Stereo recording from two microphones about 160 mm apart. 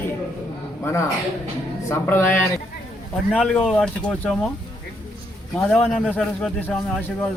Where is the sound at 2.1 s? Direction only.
15° left (ahead or behind).